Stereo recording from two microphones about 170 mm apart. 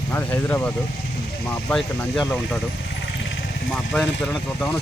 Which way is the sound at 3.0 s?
90° left.